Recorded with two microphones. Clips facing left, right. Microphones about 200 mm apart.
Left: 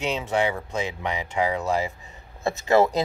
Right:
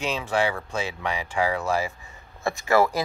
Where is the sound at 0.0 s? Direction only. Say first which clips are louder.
Left 1 dB; 20° left (ahead or behind).